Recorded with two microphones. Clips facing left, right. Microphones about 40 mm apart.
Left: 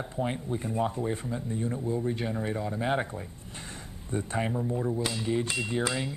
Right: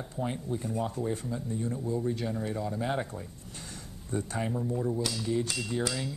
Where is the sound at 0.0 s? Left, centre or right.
Left.